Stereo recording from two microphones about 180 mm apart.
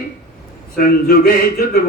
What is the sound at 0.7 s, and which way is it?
A man's voice, 60° left (ahead or behind).